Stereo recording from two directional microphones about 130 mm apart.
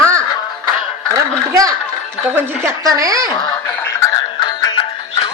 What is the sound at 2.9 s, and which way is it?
Speech, 25° right (ahead or behind).